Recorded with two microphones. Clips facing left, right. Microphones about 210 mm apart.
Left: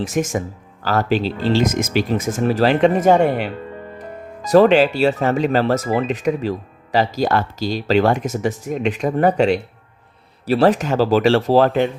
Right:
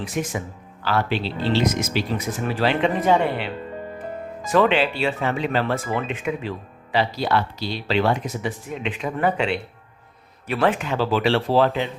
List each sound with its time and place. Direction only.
0.0 s speech: 45° left (ahead or behind)